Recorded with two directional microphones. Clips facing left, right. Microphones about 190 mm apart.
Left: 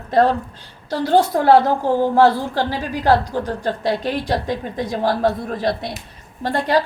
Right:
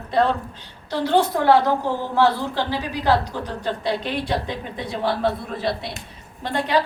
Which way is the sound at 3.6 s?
45° left (ahead or behind).